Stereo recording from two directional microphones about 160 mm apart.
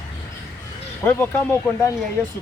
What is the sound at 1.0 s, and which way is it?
Speech, 15° left (ahead or behind).